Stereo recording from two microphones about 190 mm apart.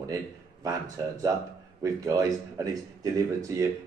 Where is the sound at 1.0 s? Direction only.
15° right (ahead or behind).